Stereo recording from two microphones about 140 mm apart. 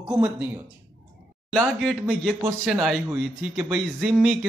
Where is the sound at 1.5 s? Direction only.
5° left (ahead or behind).